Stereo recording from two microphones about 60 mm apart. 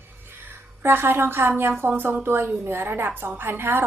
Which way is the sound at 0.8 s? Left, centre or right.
Right.